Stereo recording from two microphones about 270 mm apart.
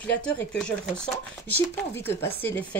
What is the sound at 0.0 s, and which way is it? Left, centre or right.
Speech, centre.